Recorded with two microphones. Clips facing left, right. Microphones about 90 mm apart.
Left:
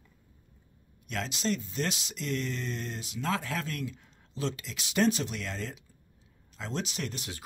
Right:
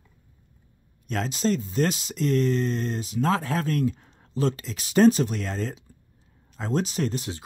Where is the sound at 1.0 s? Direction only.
40° right (ahead or behind).